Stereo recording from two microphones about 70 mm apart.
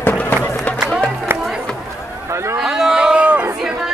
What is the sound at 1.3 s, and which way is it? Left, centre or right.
Run, right.